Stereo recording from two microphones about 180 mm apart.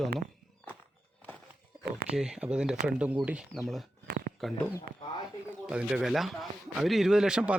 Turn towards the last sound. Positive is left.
turn(degrees=-5)  # may be behind; listen again after turning